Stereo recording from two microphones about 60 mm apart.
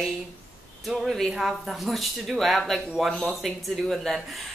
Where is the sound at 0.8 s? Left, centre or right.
Centre.